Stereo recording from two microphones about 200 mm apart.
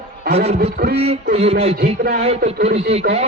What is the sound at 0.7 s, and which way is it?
Speech, 50° right (ahead or behind).